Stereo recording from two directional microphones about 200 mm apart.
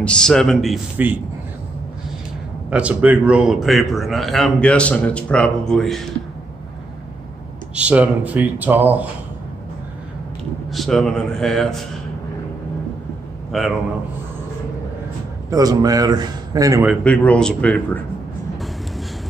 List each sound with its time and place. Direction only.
0.0 s a man's voice: 5° left (ahead or behind)
2.7 s a man's voice: 5° right (ahead or behind)
7.7 s speech: 5° right (ahead or behind)
10.7 s a man's voice: centre (ahead or behind)
13.5 s a man's voice: centre (ahead or behind)
15.5 s a man's voice: 20° right (ahead or behind)
17.0 s a man's voice: 5° left (ahead or behind)